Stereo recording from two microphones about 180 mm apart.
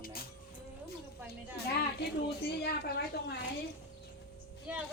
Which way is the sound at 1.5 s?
65° left (ahead or behind).